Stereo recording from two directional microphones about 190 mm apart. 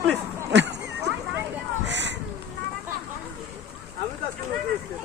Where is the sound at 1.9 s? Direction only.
70° right (ahead or behind).